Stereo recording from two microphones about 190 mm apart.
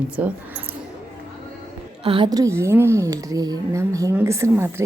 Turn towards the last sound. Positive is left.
turn(degrees=-15)  # may be behind; listen again after turning